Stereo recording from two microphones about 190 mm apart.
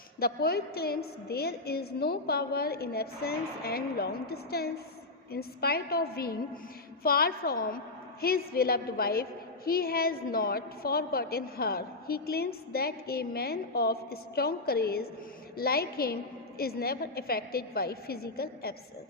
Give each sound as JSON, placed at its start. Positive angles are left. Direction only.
{"t": 0.2, "sound": "a woman's voice", "side_deg": 55}